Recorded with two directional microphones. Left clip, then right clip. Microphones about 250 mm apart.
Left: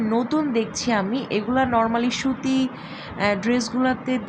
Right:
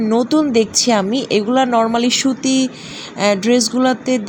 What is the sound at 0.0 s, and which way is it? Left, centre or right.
A woman's voice, right.